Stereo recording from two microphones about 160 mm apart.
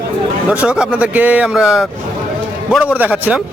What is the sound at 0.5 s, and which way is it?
Speech, 5° right (ahead or behind).